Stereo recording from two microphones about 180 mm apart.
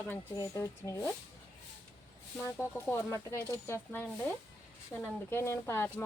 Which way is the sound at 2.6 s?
15° left (ahead or behind).